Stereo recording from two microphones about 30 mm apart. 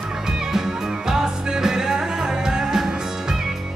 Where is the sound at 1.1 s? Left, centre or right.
Right.